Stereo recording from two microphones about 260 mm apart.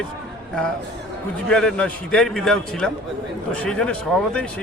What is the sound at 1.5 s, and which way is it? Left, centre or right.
A man's voice, centre.